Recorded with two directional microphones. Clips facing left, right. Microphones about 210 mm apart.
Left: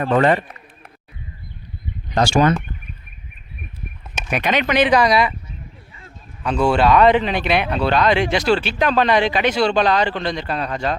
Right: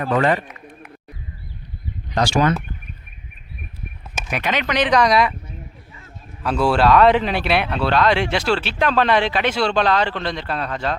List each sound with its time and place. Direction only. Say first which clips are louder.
0.0 s speech: left 3 dB; 30° left (ahead or behind)
2.1 s speech: left 2 dB; 25° left (ahead or behind)
4.3 s speech: left 3 dB; 20° left (ahead or behind); by 5.3 s centre (ahead or behind)
6.4 s speech: left 1 dB; centre (ahead or behind)